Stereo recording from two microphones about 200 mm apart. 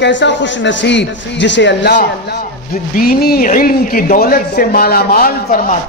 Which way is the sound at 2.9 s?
50° left (ahead or behind).